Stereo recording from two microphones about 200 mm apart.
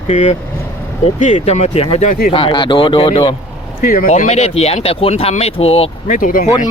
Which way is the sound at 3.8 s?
45° left (ahead or behind).